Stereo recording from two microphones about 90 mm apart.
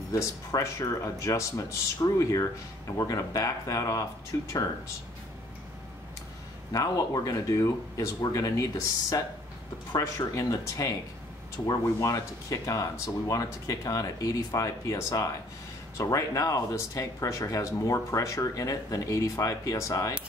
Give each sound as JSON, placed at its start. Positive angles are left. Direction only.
{"t": 0.1, "sound": "speech", "side_deg": 40}
{"t": 6.7, "sound": "speech", "side_deg": 40}
{"t": 9.9, "sound": "speech", "side_deg": 40}